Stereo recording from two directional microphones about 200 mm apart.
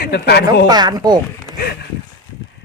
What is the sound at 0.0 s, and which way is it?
Speech, 55° left (ahead or behind).